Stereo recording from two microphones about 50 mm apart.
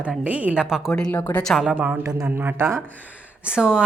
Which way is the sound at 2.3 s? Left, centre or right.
Right.